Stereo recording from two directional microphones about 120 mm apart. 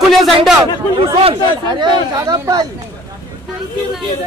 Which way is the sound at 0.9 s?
50° right (ahead or behind).